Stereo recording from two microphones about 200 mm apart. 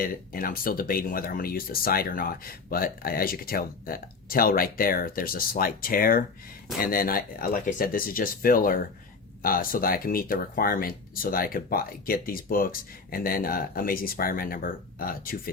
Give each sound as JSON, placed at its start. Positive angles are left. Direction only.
{"t": 0.0, "sound": "speech", "side_deg": 45}